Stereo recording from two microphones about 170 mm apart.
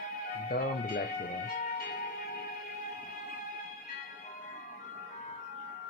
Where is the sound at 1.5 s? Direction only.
55° left (ahead or behind).